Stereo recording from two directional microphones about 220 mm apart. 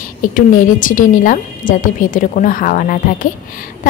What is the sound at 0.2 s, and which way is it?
A woman's voice, 35° left (ahead or behind).